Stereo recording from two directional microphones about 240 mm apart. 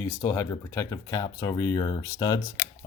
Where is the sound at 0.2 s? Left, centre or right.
Centre.